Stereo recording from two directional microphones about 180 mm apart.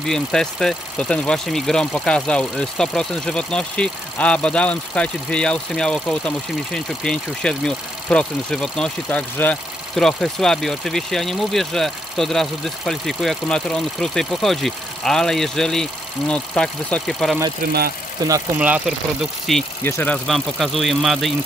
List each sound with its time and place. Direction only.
0.0 s speech: 5° left (ahead or behind)
18.2 s speech: 20° right (ahead or behind)
18.6 s speech: 10° right (ahead or behind)
19.8 s speech: 10° left (ahead or behind)